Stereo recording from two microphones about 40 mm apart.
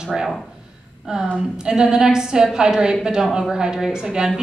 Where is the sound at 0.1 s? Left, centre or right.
Centre.